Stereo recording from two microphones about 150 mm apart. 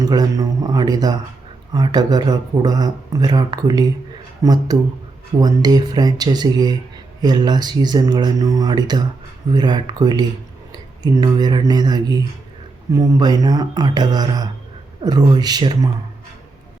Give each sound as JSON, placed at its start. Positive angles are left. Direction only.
{"t": 0.0, "sound": "speech", "side_deg": -25}